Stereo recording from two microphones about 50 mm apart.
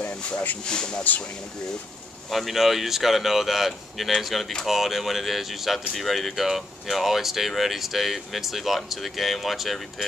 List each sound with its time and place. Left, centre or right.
0.7 s speech: centre
2.3 s speech: centre